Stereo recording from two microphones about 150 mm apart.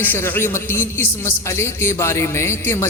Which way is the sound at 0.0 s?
10° left (ahead or behind).